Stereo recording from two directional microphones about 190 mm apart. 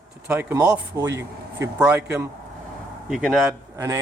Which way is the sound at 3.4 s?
15° right (ahead or behind).